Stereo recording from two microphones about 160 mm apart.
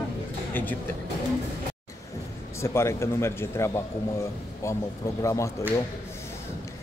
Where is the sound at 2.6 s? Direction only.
15° left (ahead or behind).